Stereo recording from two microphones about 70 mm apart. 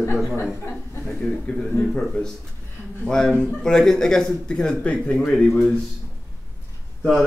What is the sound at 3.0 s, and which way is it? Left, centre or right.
Speech, centre.